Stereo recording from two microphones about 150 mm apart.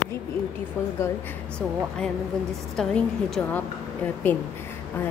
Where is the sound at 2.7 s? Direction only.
5° left (ahead or behind).